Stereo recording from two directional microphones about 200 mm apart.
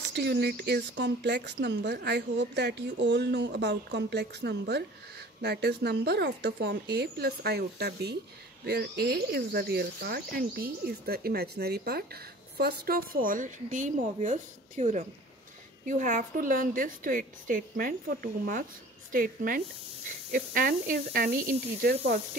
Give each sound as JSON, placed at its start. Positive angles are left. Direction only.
{"t": 0.1, "sound": "speech", "side_deg": -60}